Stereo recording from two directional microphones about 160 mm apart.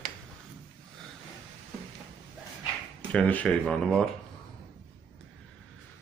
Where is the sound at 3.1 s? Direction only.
10° left (ahead or behind).